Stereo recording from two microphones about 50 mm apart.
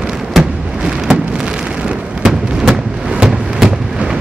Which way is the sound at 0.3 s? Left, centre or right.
Centre.